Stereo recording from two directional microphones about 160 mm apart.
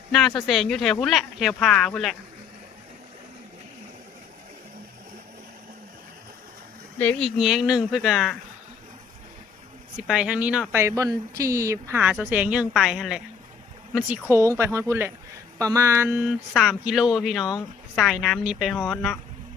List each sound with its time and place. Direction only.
0.1 s speech: centre (ahead or behind)
7.0 s speech: 5° left (ahead or behind)
10.0 s speech: 5° right (ahead or behind)